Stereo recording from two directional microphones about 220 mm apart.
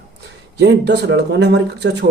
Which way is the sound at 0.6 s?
50° right (ahead or behind).